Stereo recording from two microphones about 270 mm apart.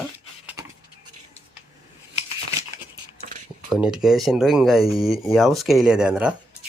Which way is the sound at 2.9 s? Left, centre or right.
Right.